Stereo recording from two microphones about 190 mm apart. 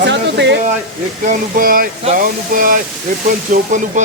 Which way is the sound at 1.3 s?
50° right (ahead or behind).